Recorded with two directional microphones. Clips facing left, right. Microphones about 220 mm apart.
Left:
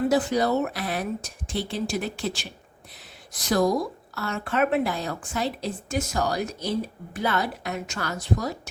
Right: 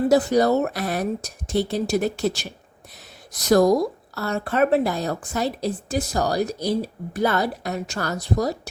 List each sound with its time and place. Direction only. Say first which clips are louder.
0.1 s a woman's voice: right 5 dB; 40° right (ahead or behind)